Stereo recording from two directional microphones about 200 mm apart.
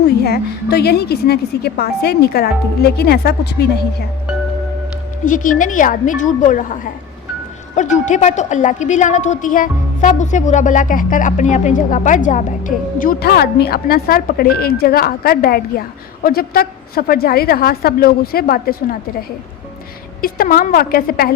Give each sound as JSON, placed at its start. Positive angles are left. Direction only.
{"t": 0.2, "sound": "a woman's voice", "side_deg": 55}
{"t": 5.2, "sound": "a woman's voice", "side_deg": 40}
{"t": 7.8, "sound": "a woman's voice", "side_deg": 35}
{"t": 20.2, "sound": "a woman's voice", "side_deg": 45}